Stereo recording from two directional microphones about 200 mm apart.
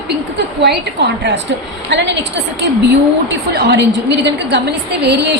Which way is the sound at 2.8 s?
55° right (ahead or behind).